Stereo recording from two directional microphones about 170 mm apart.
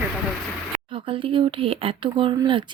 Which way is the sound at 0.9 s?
30° right (ahead or behind).